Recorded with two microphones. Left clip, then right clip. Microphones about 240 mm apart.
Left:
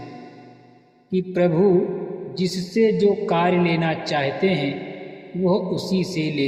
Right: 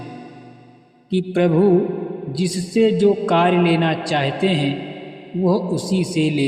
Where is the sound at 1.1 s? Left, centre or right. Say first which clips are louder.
Right 2 dB; right.